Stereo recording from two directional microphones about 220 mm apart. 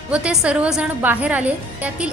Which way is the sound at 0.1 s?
5° right (ahead or behind).